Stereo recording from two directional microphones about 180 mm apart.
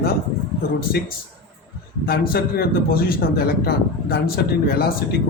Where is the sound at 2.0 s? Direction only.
55° left (ahead or behind).